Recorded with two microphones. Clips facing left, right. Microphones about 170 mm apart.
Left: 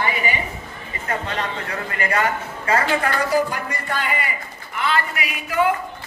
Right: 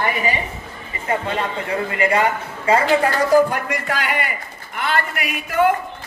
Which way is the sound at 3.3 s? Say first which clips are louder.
Right 7 dB; 45° right (ahead or behind).